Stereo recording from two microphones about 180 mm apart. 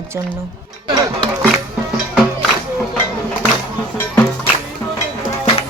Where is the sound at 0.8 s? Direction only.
25° right (ahead or behind).